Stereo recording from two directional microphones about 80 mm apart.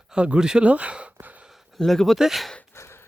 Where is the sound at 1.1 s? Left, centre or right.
Centre.